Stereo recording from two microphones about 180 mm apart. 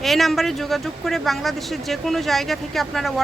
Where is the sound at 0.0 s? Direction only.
Centre (ahead or behind).